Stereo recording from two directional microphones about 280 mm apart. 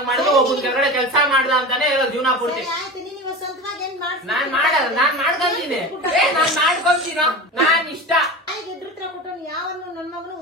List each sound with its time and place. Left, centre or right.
0.0 s a sound: centre
0.7 s a man's voice: centre
3.8 s a woman's voice: centre